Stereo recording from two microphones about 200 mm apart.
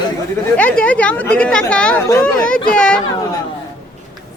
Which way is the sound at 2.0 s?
15° left (ahead or behind).